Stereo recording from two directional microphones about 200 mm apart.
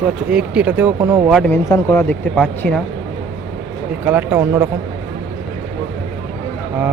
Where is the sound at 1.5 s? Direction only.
15° left (ahead or behind).